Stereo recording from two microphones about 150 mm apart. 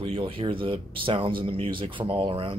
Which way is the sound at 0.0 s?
35° right (ahead or behind).